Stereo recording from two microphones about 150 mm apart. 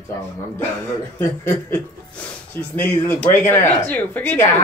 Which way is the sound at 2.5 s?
10° left (ahead or behind).